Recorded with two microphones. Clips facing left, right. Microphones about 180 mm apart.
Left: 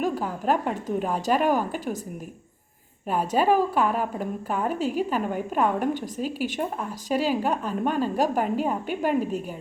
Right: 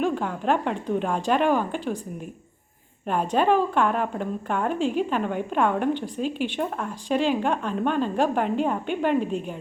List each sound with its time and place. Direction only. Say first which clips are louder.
0.0 s a woman's voice: right 1 dB; 5° left (ahead or behind)
3.1 s a woman's voice: even; 5° left (ahead or behind)